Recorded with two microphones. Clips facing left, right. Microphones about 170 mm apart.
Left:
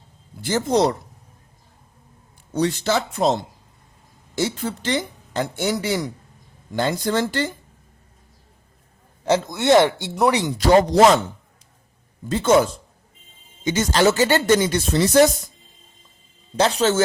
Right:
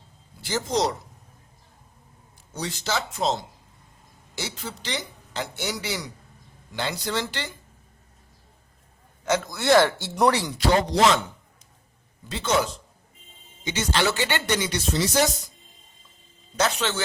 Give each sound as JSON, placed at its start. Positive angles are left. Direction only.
{"t": 0.4, "sound": "speech", "side_deg": 55}
{"t": 2.5, "sound": "speech", "side_deg": 60}
{"t": 9.2, "sound": "speech", "side_deg": 30}
{"t": 10.6, "sound": "speech", "side_deg": 45}
{"t": 12.3, "sound": "speech", "side_deg": 50}
{"t": 16.6, "sound": "speech", "side_deg": 35}